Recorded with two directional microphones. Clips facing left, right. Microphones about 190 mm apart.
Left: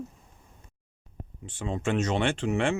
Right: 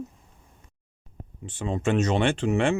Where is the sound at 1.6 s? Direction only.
45° right (ahead or behind).